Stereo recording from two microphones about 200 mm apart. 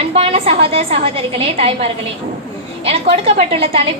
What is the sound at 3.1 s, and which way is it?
Speech, 30° right (ahead or behind).